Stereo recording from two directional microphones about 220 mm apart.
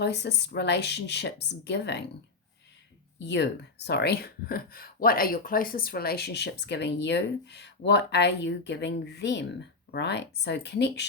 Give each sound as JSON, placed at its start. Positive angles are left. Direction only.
{"t": 0.0, "sound": "speech", "side_deg": 50}
{"t": 3.2, "sound": "speech", "side_deg": 50}